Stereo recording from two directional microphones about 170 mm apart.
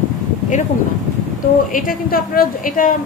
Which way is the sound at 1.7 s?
55° left (ahead or behind).